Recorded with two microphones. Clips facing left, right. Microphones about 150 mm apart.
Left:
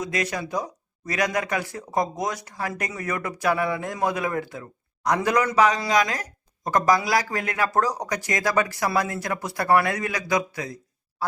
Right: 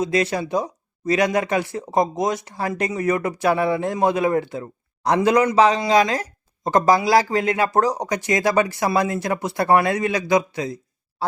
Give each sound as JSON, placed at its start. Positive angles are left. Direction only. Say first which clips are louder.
{"t": 0.0, "sound": "speech", "louder": "right 6 dB", "side_deg": -30}